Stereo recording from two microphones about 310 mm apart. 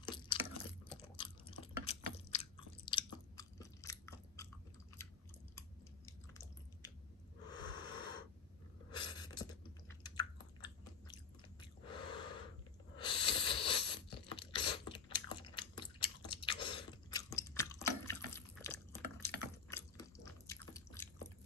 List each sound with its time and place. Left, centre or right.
0.0 s chewing: centre
7.4 s snort: centre
8.9 s typing: centre
11.8 s gasp: centre
12.9 s wheeze: centre
14.3 s chewing: centre